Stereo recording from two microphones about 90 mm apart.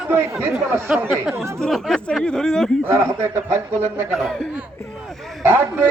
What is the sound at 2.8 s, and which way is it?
A man's voice, 30° right (ahead or behind).